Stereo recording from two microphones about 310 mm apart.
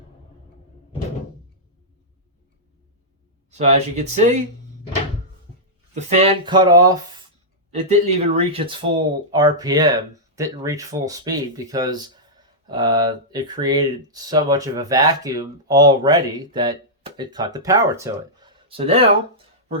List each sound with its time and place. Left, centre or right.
3.5 s speech: right
5.9 s speech: right